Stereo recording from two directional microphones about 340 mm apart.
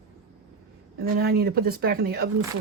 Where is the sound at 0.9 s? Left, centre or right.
Right.